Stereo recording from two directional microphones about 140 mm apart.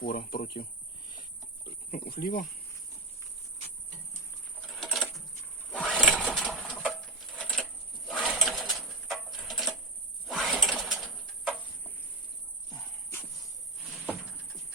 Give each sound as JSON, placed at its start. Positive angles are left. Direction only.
{"t": 0.0, "sound": "speech", "side_deg": 90}
{"t": 4.6, "sound": "a sound", "side_deg": 5}
{"t": 5.7, "sound": "sewing machine", "side_deg": 10}
{"t": 7.3, "sound": "a sound", "side_deg": 5}
{"t": 10.2, "sound": "pigeon", "side_deg": 0}
{"t": 13.8, "sound": "cupboard open or close", "side_deg": 0}